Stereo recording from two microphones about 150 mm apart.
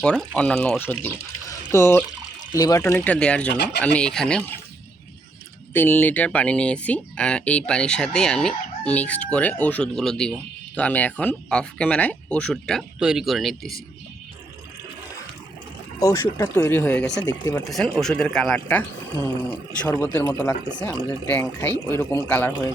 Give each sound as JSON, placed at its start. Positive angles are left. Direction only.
{"t": 0.0, "sound": "speech", "side_deg": 5}
{"t": 5.7, "sound": "speech", "side_deg": 10}
{"t": 16.0, "sound": "speech", "side_deg": 20}